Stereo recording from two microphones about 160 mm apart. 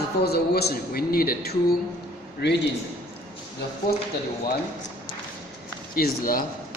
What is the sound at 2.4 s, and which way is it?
Speech, 90° left.